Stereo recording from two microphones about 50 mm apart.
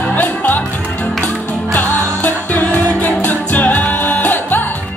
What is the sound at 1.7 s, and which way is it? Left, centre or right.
Music, left.